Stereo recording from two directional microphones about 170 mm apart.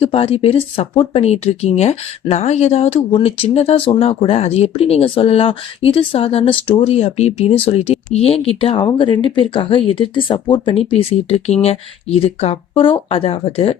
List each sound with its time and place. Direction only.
0.0 s speech: 35° left (ahead or behind)